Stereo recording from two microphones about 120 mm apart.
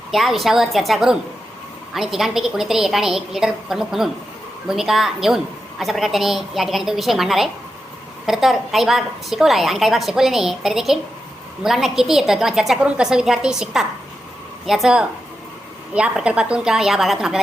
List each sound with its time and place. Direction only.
0.1 s a woman's voice: centre (ahead or behind)